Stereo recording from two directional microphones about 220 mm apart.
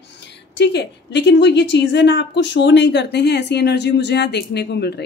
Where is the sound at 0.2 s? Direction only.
50° left (ahead or behind).